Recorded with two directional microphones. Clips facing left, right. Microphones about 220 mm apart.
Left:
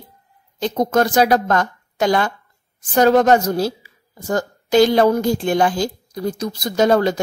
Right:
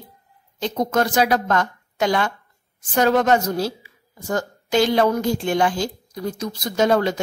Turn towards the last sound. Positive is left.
turn(degrees=40)  # may be behind; listen again after turning